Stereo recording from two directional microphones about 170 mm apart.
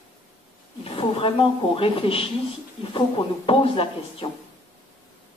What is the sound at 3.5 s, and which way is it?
Speech, 30° left (ahead or behind).